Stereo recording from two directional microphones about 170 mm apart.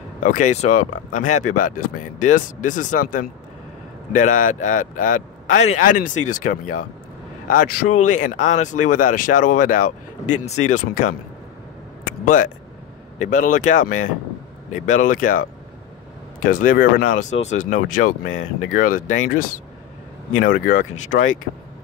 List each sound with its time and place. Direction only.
0.2 s speech: 50° left (ahead or behind)
13.2 s speech: 45° left (ahead or behind)